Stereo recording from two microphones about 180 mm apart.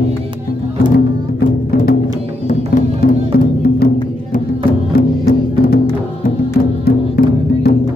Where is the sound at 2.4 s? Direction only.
50° left (ahead or behind).